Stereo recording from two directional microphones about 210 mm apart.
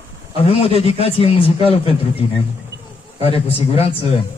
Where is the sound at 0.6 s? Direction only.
25° left (ahead or behind).